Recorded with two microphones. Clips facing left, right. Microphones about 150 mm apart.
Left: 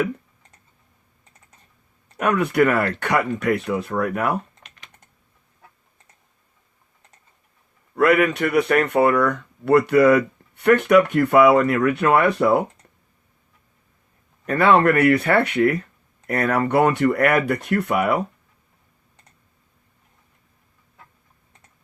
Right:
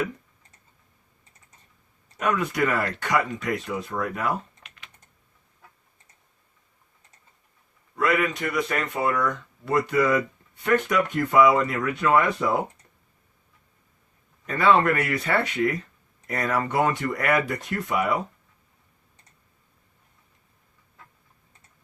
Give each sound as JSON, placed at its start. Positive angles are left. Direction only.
{"t": 2.1, "sound": "speech", "side_deg": 60}
{"t": 4.6, "sound": "typing", "side_deg": 40}
{"t": 7.9, "sound": "speech", "side_deg": 60}
{"t": 14.4, "sound": "speech", "side_deg": 60}